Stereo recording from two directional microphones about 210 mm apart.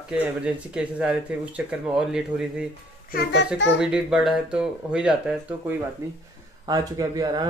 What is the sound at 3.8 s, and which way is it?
Speech, 5° right (ahead or behind).